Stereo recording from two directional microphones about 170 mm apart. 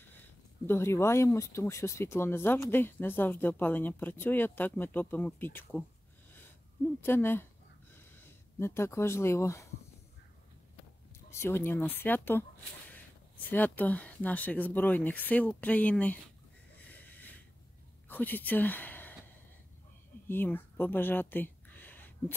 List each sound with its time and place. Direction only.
0.7 s speech: 15° left (ahead or behind)
7.0 s speech: 15° left (ahead or behind)
11.2 s speech: 15° left (ahead or behind)
16.7 s a sound: 10° left (ahead or behind)
18.0 s speech: 10° left (ahead or behind)
20.2 s a sound: 10° left (ahead or behind)